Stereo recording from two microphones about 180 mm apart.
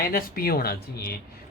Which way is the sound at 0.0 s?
55° left (ahead or behind).